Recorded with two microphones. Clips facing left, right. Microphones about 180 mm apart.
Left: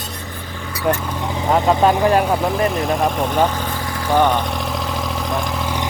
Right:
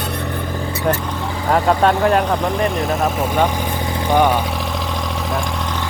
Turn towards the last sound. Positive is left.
turn(degrees=5)  # may be behind; listen again after turning